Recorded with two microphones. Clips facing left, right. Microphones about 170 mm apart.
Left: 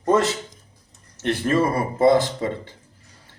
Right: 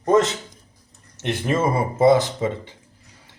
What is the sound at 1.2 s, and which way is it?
A man's voice, 15° right (ahead or behind).